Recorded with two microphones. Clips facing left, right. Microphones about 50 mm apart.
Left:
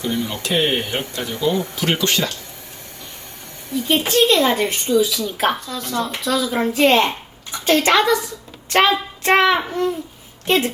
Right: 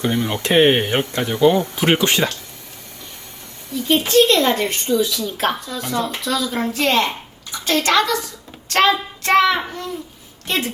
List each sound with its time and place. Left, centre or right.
0.0 s speech: right
1.3 s speech: right
1.7 s speech: right
3.8 s a woman's voice: centre
8.7 s child singing: centre
10.4 s a woman's voice: left